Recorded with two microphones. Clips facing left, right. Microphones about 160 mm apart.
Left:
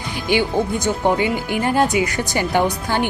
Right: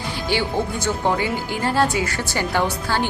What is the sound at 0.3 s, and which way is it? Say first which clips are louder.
A woman's voice: left 5 dB; 15° left (ahead or behind).